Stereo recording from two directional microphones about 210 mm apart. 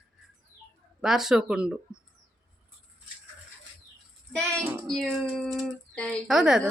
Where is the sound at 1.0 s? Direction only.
Centre (ahead or behind).